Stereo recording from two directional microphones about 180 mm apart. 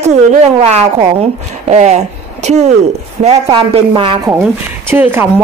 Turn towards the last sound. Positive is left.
turn(degrees=-10)  # may be behind; listen again after turning